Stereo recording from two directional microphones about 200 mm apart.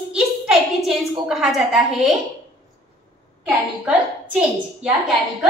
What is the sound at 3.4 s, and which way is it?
A child's voice, 5° right (ahead or behind).